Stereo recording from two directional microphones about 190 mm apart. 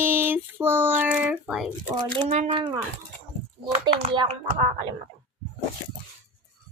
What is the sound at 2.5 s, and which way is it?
Speech, 25° right (ahead or behind).